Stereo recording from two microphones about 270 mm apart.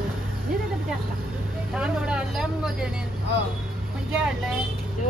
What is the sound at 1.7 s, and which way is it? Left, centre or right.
A woman's voice, centre.